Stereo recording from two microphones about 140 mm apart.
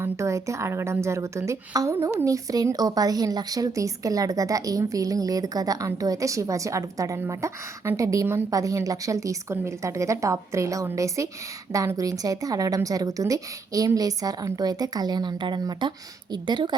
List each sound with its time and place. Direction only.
0.0 s a woman's voice: 20° right (ahead or behind)